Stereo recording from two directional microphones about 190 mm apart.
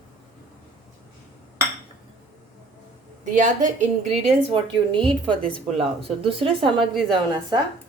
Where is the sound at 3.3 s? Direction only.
40° right (ahead or behind).